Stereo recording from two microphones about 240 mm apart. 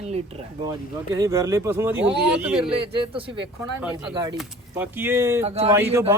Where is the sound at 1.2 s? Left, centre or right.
Centre.